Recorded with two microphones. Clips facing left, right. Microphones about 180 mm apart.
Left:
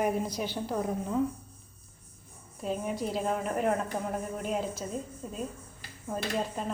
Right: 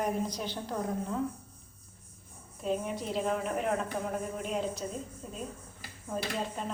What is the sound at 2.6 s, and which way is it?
A woman's voice, 5° left (ahead or behind).